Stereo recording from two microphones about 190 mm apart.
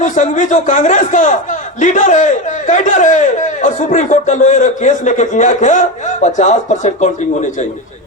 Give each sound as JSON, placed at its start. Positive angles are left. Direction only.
{"t": 0.0, "sound": "a man's voice", "side_deg": 40}